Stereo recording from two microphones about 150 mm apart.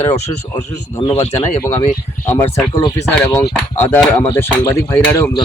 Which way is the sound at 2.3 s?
15° left (ahead or behind).